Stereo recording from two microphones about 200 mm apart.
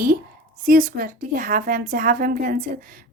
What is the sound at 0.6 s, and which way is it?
A woman's voice, 45° right (ahead or behind).